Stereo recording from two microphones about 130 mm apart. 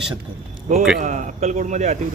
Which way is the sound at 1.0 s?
75° right (ahead or behind).